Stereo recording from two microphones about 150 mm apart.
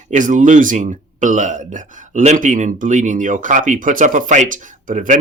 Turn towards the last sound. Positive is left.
turn(degrees=-60)  # may be behind; listen again after turning